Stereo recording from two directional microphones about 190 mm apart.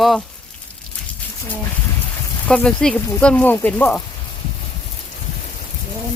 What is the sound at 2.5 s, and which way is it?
Speech, 5° left (ahead or behind).